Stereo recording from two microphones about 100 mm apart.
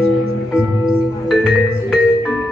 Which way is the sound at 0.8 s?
5° right (ahead or behind).